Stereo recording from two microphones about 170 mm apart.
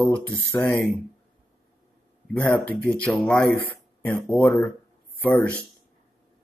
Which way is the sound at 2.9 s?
5° left (ahead or behind).